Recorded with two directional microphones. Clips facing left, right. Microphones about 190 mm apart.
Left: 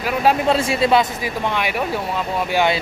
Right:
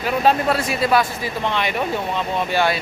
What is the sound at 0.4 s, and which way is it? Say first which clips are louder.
Speech: left 3 dB; 25° left (ahead or behind).